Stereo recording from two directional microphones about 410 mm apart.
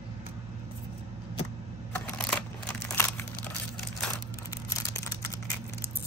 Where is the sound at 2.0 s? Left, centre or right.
Centre.